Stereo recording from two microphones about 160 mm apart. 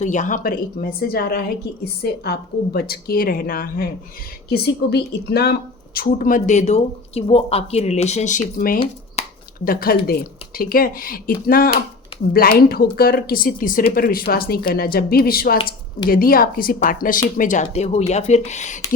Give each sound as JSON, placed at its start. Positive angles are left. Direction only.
{"t": 0.0, "sound": "speech", "side_deg": 50}
{"t": 4.4, "sound": "speech", "side_deg": 80}